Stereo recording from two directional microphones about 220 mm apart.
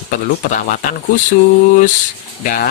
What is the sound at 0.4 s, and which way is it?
Speech, 40° left (ahead or behind).